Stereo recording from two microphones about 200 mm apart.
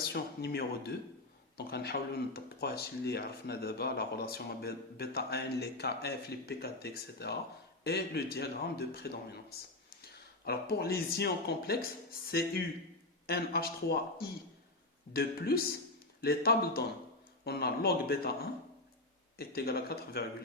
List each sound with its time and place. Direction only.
0.1 s speech: 55° left (ahead or behind)
19.4 s speech: 50° left (ahead or behind)